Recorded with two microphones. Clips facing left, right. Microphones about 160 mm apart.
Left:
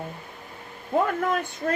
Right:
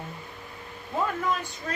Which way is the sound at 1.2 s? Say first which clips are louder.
Left 3 dB; 55° left (ahead or behind).